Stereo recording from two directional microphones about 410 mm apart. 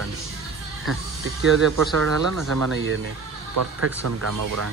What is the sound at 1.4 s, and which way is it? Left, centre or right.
Speech, right.